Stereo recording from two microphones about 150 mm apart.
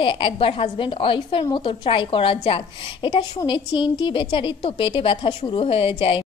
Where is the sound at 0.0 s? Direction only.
35° left (ahead or behind).